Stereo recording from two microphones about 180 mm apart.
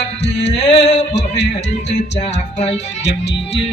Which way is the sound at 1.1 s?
75° left (ahead or behind).